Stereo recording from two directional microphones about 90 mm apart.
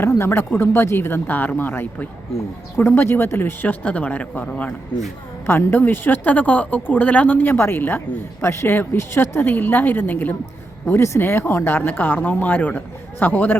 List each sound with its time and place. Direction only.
0.0 s speech: 30° left (ahead or behind)